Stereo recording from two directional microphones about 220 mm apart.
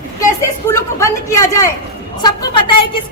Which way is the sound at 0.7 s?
15° left (ahead or behind).